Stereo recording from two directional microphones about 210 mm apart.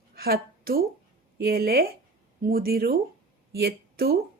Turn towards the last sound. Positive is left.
turn(degrees=-50)  # may be behind; listen again after turning